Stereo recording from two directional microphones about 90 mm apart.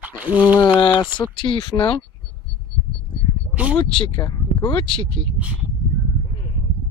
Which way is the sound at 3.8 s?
75° left (ahead or behind).